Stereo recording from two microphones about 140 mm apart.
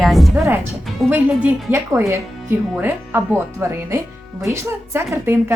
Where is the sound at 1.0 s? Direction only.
10° right (ahead or behind).